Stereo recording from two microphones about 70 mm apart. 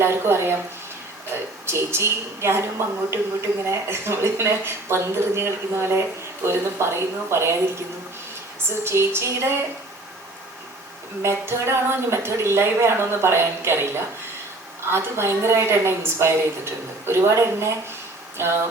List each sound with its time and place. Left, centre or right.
0.0 s a woman's voice: right
1.6 s a woman's voice: right
8.6 s a woman's voice: right
11.2 s a woman's voice: right